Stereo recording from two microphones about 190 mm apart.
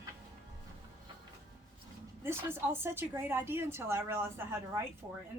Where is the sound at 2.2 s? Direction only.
10° right (ahead or behind).